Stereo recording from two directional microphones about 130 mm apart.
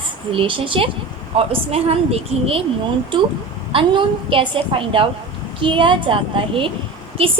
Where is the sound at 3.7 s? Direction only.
40° right (ahead or behind).